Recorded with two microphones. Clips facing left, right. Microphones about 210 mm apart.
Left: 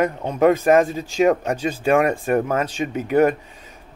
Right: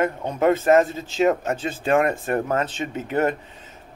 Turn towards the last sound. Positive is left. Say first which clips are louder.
# left 5 dB
turn(degrees=15)  # may be behind; listen again after turning